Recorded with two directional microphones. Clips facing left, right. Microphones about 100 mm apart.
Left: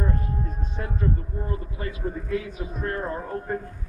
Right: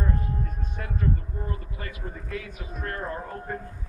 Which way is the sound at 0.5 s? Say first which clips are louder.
Left 3 dB; 25° left (ahead or behind).